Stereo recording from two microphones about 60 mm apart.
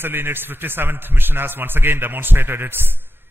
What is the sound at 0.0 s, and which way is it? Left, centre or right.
A man's voice, right.